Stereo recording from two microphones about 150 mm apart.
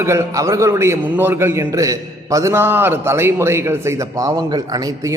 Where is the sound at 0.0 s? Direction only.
20° right (ahead or behind).